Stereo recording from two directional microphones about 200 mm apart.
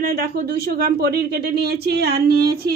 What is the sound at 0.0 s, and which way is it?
Speech, 50° right (ahead or behind).